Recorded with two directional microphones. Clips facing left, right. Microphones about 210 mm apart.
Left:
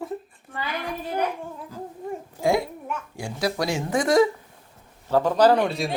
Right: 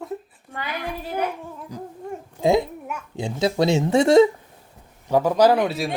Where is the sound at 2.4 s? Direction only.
20° right (ahead or behind).